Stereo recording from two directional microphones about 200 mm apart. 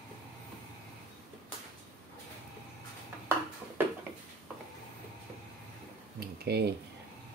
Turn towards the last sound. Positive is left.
turn(degrees=-55)  # may be behind; listen again after turning